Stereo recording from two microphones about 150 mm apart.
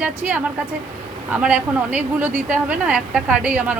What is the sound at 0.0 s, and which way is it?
A woman's voice, 10° right (ahead or behind).